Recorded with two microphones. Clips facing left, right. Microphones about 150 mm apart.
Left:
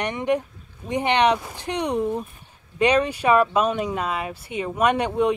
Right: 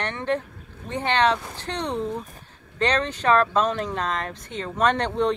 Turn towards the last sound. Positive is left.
turn(degrees=10)  # may be behind; listen again after turning